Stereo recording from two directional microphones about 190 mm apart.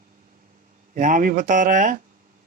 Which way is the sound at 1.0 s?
45° right (ahead or behind).